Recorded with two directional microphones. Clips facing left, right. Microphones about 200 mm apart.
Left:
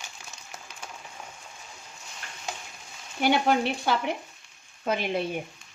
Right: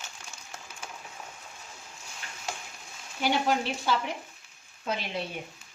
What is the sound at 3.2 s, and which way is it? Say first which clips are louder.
A woman's voice: left 4 dB; 60° left (ahead or behind).